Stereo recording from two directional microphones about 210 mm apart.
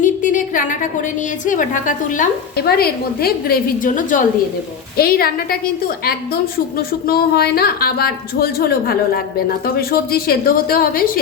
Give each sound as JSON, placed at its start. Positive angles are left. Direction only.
{"t": 0.0, "sound": "a woman's voice", "side_deg": 40}